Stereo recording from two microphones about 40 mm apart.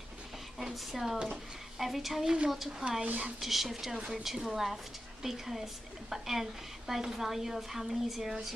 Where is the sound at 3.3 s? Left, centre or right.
Centre.